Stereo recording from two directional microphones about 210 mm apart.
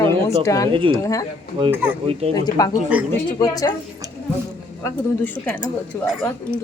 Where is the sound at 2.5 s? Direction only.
20° left (ahead or behind).